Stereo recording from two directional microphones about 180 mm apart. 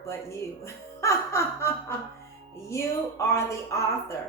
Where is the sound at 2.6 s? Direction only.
15° left (ahead or behind).